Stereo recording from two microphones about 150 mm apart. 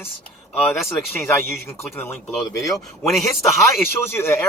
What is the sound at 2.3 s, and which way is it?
Speech, centre (ahead or behind).